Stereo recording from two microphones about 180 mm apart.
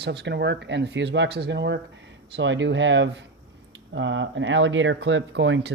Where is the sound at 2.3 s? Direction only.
90° right.